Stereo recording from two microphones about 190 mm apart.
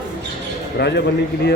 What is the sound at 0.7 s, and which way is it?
Speech, 65° left (ahead or behind).